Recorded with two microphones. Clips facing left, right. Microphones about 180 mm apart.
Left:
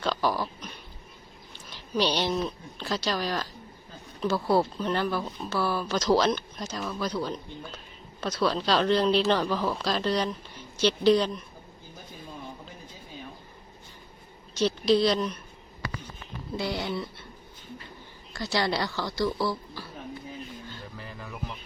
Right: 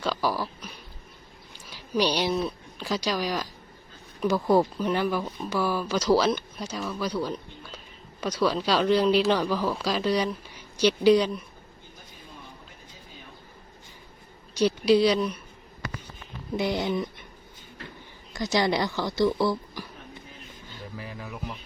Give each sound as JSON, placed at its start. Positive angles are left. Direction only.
{"t": 0.0, "sound": "a sound", "side_deg": -10}
{"t": 1.5, "sound": "speech", "side_deg": -10}
{"t": 14.6, "sound": "speech", "side_deg": -10}
{"t": 16.6, "sound": "speech", "side_deg": -20}
{"t": 18.3, "sound": "a woman's voice", "side_deg": -20}
{"t": 20.9, "sound": "a sound", "side_deg": -5}